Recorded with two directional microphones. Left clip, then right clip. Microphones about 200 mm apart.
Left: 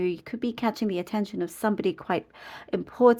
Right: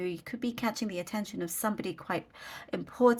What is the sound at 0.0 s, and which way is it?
Speech, 40° left (ahead or behind).